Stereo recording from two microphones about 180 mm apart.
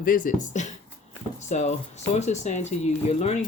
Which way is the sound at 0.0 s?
50° left (ahead or behind).